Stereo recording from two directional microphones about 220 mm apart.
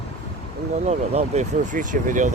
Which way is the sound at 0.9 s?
30° right (ahead or behind).